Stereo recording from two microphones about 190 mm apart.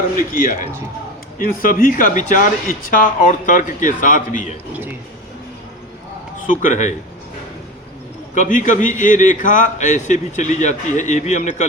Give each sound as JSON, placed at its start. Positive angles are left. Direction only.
{"t": 1.4, "sound": "speech", "side_deg": 50}
{"t": 6.5, "sound": "speech", "side_deg": 40}
{"t": 8.4, "sound": "a man's voice", "side_deg": 45}